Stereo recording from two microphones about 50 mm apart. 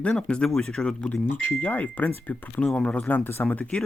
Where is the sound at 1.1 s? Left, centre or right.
Left.